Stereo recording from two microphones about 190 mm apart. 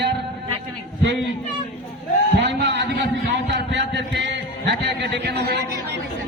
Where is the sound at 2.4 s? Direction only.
65° right (ahead or behind).